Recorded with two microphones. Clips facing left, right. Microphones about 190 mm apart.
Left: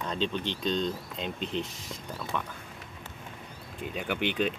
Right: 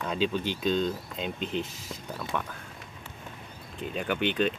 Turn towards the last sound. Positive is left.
turn(degrees=10)  # may be behind; listen again after turning